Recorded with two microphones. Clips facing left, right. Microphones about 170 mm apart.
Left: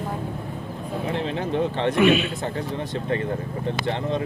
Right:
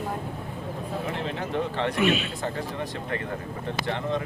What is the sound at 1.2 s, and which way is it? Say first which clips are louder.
Speech: left 6 dB; 20° left (ahead or behind).